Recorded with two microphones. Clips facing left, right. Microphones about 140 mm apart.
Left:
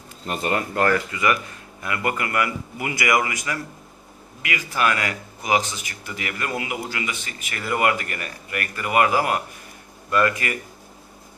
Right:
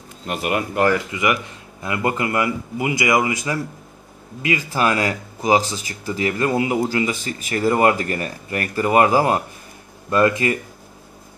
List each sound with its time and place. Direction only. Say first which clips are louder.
0.3 s speech: right 2 dB; 10° right (ahead or behind)